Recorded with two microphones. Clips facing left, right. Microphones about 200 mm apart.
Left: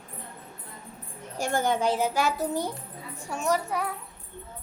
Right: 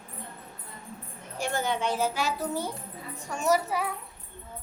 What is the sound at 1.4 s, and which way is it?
Speech, 50° left (ahead or behind).